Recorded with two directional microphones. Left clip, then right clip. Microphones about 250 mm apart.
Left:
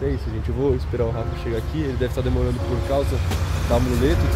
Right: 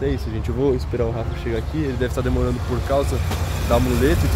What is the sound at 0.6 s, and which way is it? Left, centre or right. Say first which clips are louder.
Speech: right 2 dB; centre.